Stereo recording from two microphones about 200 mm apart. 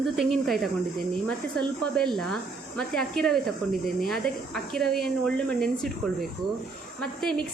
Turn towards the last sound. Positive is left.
turn(degrees=5)  # may be behind; listen again after turning